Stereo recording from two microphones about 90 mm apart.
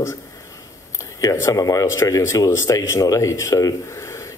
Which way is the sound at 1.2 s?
35° left (ahead or behind).